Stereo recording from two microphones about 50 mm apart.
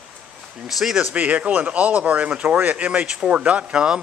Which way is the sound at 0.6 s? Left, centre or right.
Centre.